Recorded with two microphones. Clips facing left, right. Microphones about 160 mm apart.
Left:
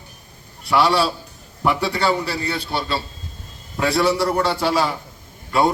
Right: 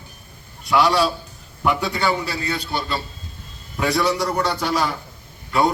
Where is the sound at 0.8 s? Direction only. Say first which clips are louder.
Even; 30° left (ahead or behind).